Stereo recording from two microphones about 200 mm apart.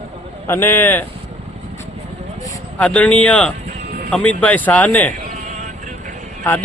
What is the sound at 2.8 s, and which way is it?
Speech, 5° left (ahead or behind).